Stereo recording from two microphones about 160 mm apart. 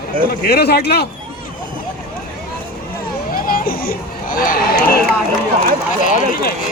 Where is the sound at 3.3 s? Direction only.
65° left (ahead or behind).